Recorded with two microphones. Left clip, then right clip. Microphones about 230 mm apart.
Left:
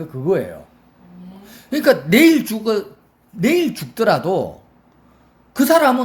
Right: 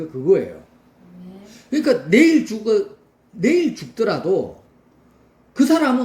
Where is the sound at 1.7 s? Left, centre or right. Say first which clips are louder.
Left 2 dB; left.